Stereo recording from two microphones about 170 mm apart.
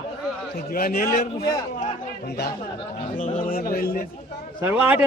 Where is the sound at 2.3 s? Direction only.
70° left (ahead or behind).